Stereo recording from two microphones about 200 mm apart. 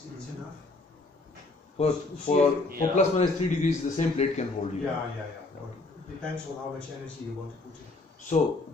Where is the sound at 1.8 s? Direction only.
30° left (ahead or behind).